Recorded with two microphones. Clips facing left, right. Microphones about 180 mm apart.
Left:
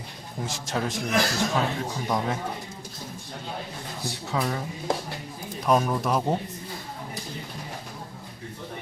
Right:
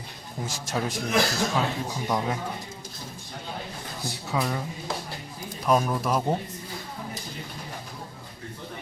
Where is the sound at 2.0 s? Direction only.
Centre (ahead or behind).